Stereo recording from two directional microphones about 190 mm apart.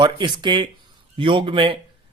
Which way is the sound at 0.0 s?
25° right (ahead or behind).